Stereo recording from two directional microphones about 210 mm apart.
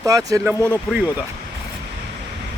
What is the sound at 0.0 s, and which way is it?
Speech, 15° right (ahead or behind).